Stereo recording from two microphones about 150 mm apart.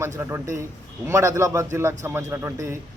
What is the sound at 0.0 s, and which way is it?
A man's voice, 15° right (ahead or behind).